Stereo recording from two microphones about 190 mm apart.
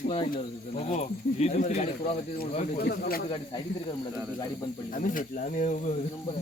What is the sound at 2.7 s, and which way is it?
Speech, 55° left (ahead or behind).